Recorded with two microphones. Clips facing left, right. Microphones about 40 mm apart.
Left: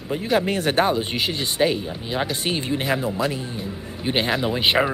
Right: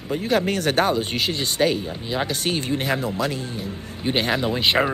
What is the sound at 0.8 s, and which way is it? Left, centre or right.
Speech, centre.